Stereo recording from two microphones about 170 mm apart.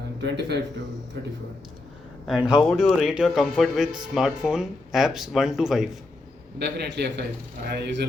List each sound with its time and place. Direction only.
0.2 s a man's voice: 90° right
2.2 s speech: 5° right (ahead or behind)
6.6 s a man's voice: 85° right